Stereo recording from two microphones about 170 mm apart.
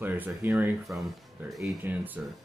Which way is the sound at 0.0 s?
10° right (ahead or behind).